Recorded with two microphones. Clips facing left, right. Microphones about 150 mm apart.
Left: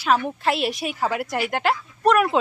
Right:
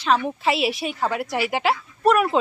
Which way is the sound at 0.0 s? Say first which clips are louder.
Even; centre (ahead or behind).